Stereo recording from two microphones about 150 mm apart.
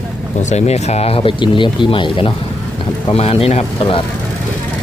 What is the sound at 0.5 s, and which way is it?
Speech, 45° left (ahead or behind).